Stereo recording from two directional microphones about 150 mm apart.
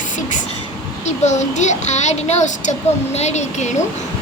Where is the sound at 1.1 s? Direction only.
50° left (ahead or behind).